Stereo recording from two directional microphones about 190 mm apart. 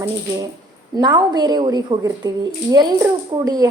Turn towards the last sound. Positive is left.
turn(degrees=-20)  # may be behind; listen again after turning